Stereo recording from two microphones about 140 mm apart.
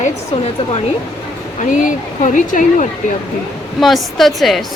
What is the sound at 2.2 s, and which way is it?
Speech, 60° left (ahead or behind).